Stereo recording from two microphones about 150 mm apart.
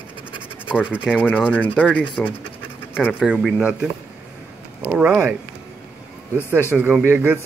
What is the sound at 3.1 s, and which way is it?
Speech, 5° right (ahead or behind).